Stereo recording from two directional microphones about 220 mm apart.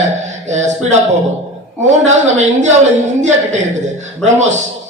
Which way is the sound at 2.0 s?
30° right (ahead or behind).